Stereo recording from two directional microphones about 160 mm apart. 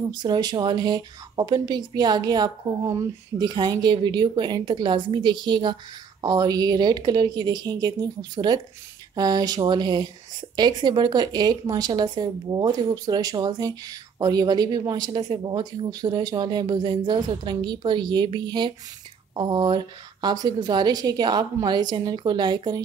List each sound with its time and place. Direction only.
0.1 s speech: 25° right (ahead or behind)